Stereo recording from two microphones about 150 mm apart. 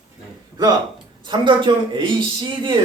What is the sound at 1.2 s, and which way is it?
A man's voice, 30° right (ahead or behind).